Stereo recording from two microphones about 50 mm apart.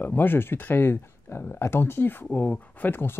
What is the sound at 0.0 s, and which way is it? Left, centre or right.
Speech, left.